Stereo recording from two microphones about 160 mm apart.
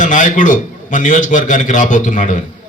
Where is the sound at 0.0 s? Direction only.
50° left (ahead or behind).